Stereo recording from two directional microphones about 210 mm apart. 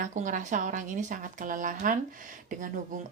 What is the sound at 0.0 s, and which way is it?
Speech, 35° right (ahead or behind).